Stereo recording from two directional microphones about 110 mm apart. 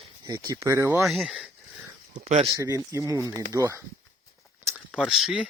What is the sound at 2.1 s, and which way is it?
Speech, 75° right (ahead or behind).